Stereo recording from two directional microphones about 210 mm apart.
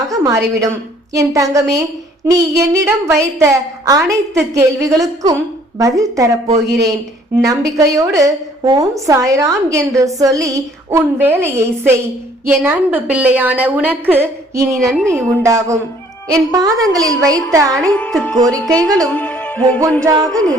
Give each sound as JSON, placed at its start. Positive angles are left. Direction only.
{"t": 0.1, "sound": "a woman's voice", "side_deg": -15}
{"t": 7.4, "sound": "a woman's voice", "side_deg": -15}
{"t": 14.8, "sound": "speech", "side_deg": 0}
{"t": 15.0, "sound": "a woman's voice", "side_deg": -15}
{"t": 17.8, "sound": "music", "side_deg": 5}
{"t": 18.5, "sound": "speech", "side_deg": 5}
{"t": 19.0, "sound": "music", "side_deg": 5}
{"t": 20.1, "sound": "a woman's voice", "side_deg": -15}